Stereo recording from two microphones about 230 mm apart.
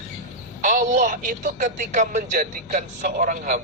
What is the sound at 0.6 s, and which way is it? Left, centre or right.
Speech, right.